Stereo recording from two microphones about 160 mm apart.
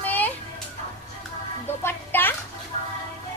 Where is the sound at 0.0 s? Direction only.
10° left (ahead or behind).